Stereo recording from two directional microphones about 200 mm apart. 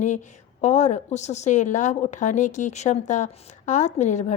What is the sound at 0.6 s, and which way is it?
A woman's voice, 35° left (ahead or behind).